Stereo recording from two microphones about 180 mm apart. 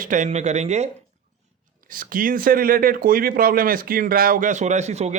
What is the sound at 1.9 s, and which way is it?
A man's voice, 50° right (ahead or behind).